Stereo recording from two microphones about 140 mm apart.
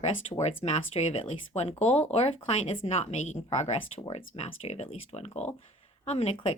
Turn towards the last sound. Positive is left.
turn(degrees=50)  # may be behind; listen again after turning